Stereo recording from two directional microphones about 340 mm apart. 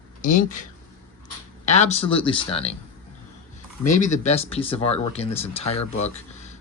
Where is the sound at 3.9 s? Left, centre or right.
Left.